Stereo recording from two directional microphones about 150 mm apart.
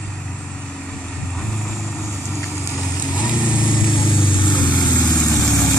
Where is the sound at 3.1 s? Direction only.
30° left (ahead or behind).